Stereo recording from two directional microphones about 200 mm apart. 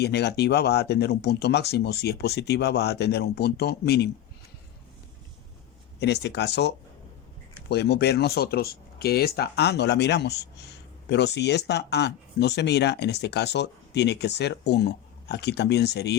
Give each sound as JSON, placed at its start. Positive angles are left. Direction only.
{"t": 0.0, "sound": "speech", "side_deg": 55}
{"t": 6.0, "sound": "speech", "side_deg": 55}